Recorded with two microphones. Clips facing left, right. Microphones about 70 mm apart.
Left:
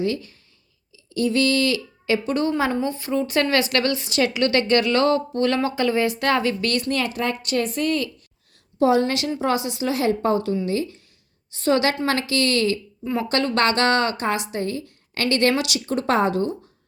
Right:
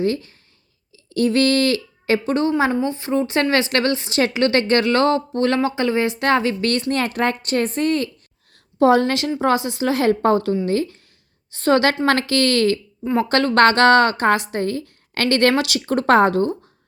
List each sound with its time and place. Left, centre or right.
0.0 s a woman's voice: right
1.1 s a woman's voice: right
6.9 s a woman's voice: right
8.8 s a woman's voice: right